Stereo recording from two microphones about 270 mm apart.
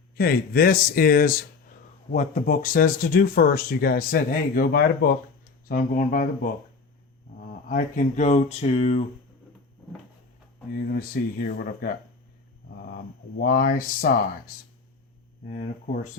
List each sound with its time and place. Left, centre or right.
0.2 s speech: left
7.3 s a sound: left
10.9 s speech: left
13.4 s speech: left
15.4 s speech: left